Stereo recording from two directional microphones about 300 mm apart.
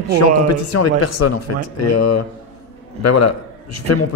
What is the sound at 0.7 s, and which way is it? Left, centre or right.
Speech, left.